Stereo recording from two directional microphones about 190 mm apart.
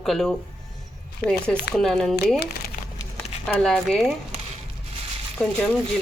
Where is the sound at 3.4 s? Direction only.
5° left (ahead or behind).